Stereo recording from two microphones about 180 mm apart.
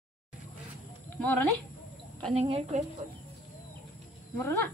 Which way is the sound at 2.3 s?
35° right (ahead or behind).